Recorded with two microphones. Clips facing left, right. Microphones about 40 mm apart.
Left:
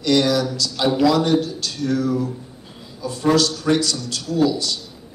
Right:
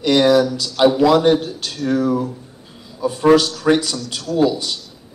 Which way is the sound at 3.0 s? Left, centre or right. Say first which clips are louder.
Right 5 dB; right.